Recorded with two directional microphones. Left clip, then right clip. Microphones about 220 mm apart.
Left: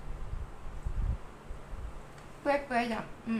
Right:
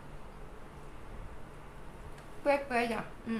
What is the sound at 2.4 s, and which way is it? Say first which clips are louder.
Speech: even; 5° right (ahead or behind).